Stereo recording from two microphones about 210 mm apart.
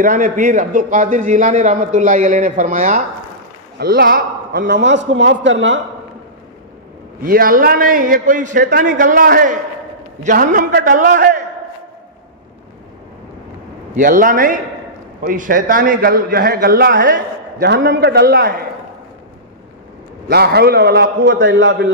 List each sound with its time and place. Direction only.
0.0 s a man's voice: 40° right (ahead or behind); by 5.8 s 60° right (ahead or behind)
7.2 s a man's voice: 45° right (ahead or behind)
13.9 s a man's voice: 40° right (ahead or behind)
20.2 s a man's voice: 50° right (ahead or behind)